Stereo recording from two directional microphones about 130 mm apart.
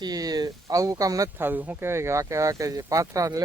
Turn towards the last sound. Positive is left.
turn(degrees=-25)  # may be behind; listen again after turning